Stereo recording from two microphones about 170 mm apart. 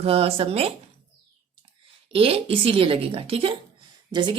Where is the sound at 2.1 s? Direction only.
35° right (ahead or behind).